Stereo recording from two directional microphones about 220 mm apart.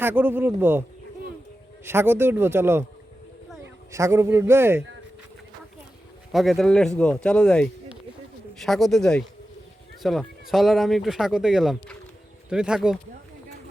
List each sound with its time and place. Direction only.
0.0 s speech: 10° right (ahead or behind)
3.9 s speech: 15° right (ahead or behind)
6.3 s speech: centre (ahead or behind)